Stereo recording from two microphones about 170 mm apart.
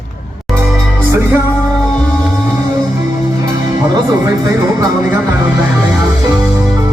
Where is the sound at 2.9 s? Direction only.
20° right (ahead or behind).